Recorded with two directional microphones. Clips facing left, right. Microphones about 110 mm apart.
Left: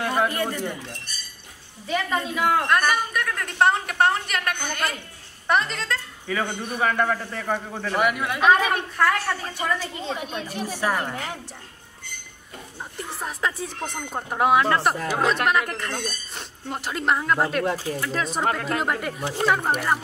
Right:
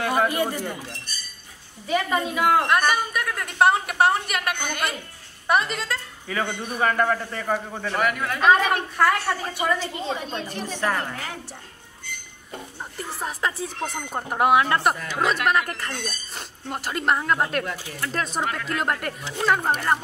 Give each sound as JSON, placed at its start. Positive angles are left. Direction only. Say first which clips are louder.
{"t": 0.0, "sound": "a woman's voice", "louder": "right 1 dB", "side_deg": -5}
{"t": 8.9, "sound": "a woman's voice", "louder": "right 1 dB", "side_deg": -5}
{"t": 10.2, "sound": "a woman's voice", "louder": "even", "side_deg": 10}
{"t": 13.1, "sound": "a man's voice", "louder": "even", "side_deg": 0}
{"t": 15.0, "sound": "speech", "louder": "left 3 dB", "side_deg": 40}
{"t": 15.4, "sound": "a man's voice", "louder": "even", "side_deg": 0}
{"t": 17.6, "sound": "speech", "louder": "left 7 dB", "side_deg": 35}
{"t": 18.0, "sound": "a man's voice", "louder": "right 4 dB", "side_deg": 0}
{"t": 18.4, "sound": "speech", "louder": "left 5 dB", "side_deg": 40}
{"t": 18.8, "sound": "a man's voice", "louder": "left 1 dB", "side_deg": 0}